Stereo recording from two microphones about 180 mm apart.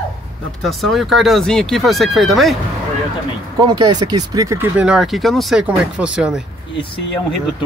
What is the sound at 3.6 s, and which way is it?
Speech, 25° right (ahead or behind).